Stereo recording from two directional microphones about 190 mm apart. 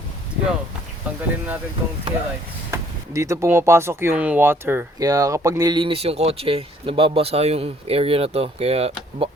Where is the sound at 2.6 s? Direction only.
15° right (ahead or behind).